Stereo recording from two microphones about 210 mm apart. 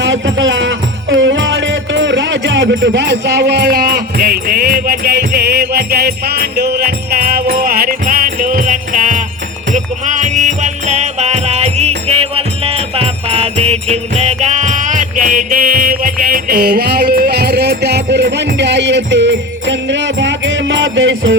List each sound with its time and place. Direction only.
0.0 s music: 60° right (ahead or behind)